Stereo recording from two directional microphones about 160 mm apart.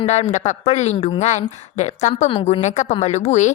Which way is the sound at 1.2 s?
45° left (ahead or behind).